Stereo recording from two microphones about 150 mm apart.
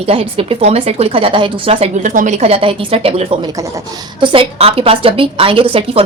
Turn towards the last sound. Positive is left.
turn(degrees=-35)  # may be behind; listen again after turning